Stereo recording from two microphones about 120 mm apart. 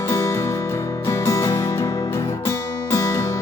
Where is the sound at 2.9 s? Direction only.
25° left (ahead or behind).